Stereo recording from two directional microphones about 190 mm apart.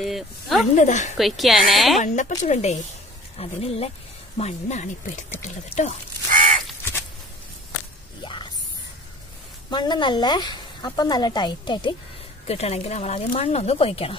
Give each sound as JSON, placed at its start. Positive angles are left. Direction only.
{"t": 0.0, "sound": "speech", "side_deg": 0}
{"t": 0.7, "sound": "speech", "side_deg": 40}
{"t": 1.1, "sound": "a woman's voice", "side_deg": 0}
{"t": 2.0, "sound": "speech", "side_deg": 40}
{"t": 8.2, "sound": "a sound", "side_deg": 25}
{"t": 9.7, "sound": "a woman's voice", "side_deg": 25}
{"t": 12.4, "sound": "speech", "side_deg": 35}